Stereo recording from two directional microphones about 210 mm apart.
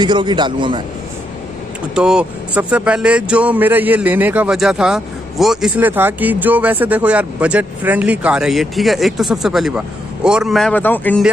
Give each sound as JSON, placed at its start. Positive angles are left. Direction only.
{"t": 0.0, "sound": "a man's voice", "side_deg": -20}
{"t": 2.0, "sound": "speech", "side_deg": -5}